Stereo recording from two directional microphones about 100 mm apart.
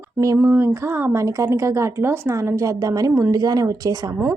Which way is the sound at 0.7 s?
25° right (ahead or behind).